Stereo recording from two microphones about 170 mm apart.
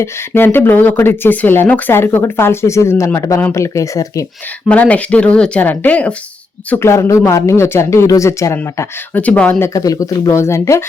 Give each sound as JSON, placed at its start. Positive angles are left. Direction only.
{"t": 0.0, "sound": "speech", "side_deg": 15}
{"t": 4.7, "sound": "speech", "side_deg": 10}